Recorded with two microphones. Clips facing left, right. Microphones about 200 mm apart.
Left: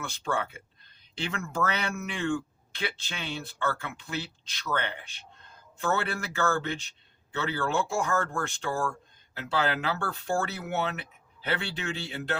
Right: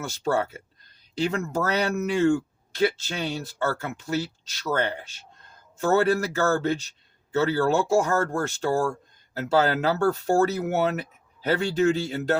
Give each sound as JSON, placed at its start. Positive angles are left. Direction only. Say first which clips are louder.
{"t": 0.0, "sound": "speech", "louder": "right 6 dB", "side_deg": -40}